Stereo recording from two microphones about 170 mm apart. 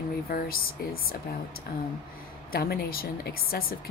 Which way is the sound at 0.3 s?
60° left (ahead or behind).